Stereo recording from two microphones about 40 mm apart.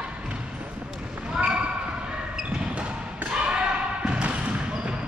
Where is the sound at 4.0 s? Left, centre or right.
Right.